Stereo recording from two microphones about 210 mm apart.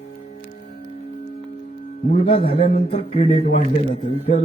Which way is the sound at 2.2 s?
25° left (ahead or behind).